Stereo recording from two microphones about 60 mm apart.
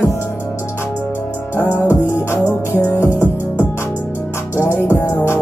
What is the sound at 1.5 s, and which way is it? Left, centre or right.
Music, left.